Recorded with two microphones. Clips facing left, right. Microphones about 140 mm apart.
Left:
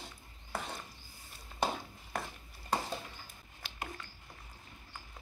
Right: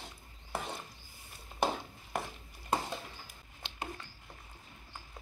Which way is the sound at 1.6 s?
20° right (ahead or behind).